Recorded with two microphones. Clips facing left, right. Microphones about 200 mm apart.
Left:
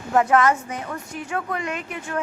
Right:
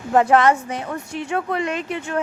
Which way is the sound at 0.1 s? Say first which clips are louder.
Right 3 dB; 30° right (ahead or behind).